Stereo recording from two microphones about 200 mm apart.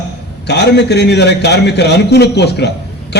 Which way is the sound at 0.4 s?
60° left (ahead or behind).